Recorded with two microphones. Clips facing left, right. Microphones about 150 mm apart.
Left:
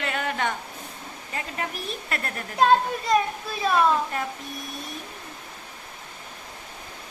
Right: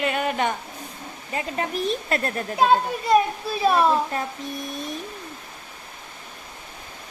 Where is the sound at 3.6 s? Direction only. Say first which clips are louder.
Right 2 dB; 30° right (ahead or behind).